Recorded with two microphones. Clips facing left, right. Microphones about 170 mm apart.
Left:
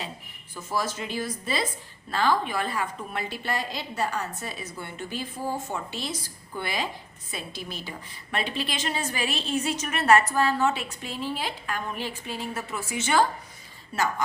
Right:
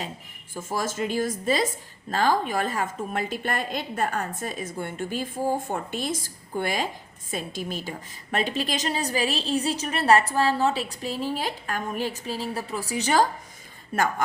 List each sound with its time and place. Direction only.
0.5 s a woman's voice: 45° right (ahead or behind)
13.9 s a woman's voice: 50° right (ahead or behind)